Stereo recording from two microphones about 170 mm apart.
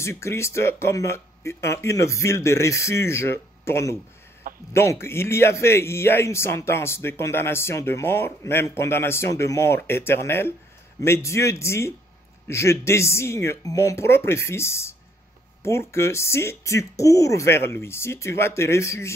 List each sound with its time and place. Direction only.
0.0 s a man's voice: 15° left (ahead or behind)